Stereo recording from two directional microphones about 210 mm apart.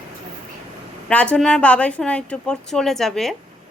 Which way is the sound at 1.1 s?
5° left (ahead or behind).